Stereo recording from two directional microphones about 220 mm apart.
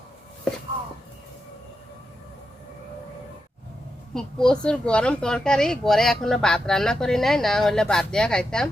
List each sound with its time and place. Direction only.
4.1 s speech: 5° left (ahead or behind)